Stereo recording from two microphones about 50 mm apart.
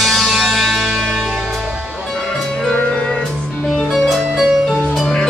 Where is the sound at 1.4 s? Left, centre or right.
Centre.